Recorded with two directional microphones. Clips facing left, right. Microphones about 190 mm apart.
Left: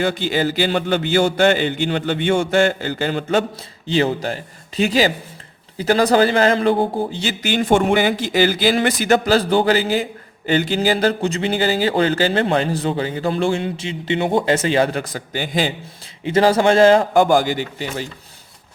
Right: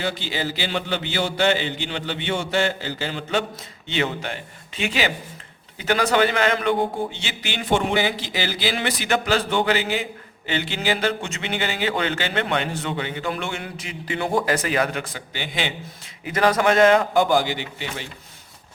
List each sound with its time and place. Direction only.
0.0 s a man's voice: 50° left (ahead or behind)
3.8 s a man's voice: 35° left (ahead or behind)
16.2 s speech: 30° left (ahead or behind)
17.2 s a man's voice: 45° left (ahead or behind)